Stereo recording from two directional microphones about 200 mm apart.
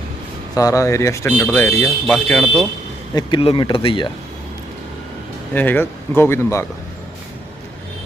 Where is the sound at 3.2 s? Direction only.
25° left (ahead or behind).